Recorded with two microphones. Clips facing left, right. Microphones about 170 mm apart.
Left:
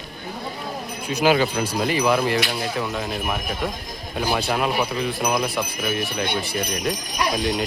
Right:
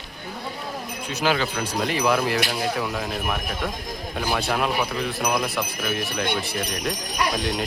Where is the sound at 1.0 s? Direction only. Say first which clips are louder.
Left 5 dB; 15° left (ahead or behind).